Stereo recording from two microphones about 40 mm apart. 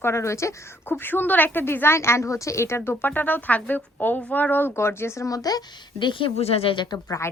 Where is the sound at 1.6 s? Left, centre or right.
Left.